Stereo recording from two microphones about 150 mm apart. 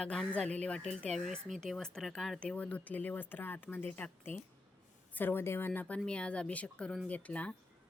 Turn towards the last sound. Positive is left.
turn(degrees=10)  # may be behind; listen again after turning